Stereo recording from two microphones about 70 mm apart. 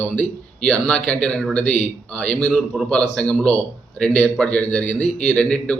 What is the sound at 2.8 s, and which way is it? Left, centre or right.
A man's voice, centre.